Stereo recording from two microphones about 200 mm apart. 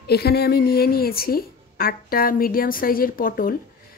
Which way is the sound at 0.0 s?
55° left (ahead or behind).